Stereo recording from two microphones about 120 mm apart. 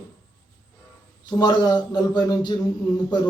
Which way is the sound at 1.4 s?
35° left (ahead or behind).